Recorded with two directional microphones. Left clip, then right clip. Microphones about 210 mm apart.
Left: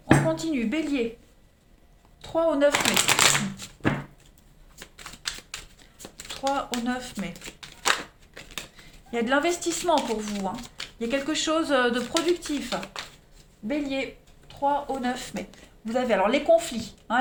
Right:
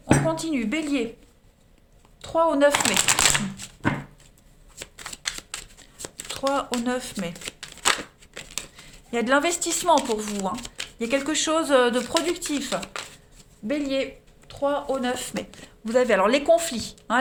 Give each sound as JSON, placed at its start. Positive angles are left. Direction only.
{"t": 0.3, "sound": "speech", "side_deg": -30}
{"t": 2.2, "sound": "speech", "side_deg": -40}
{"t": 2.8, "sound": "speech", "side_deg": -25}
{"t": 6.1, "sound": "speech", "side_deg": -30}
{"t": 7.8, "sound": "a sound", "side_deg": -30}
{"t": 8.4, "sound": "speech", "side_deg": -35}
{"t": 15.9, "sound": "speech", "side_deg": -50}